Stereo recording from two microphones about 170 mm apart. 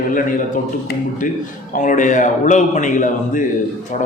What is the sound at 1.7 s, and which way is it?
Speech, 50° left (ahead or behind).